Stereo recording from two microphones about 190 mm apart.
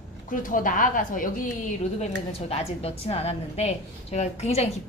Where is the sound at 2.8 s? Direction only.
35° left (ahead or behind).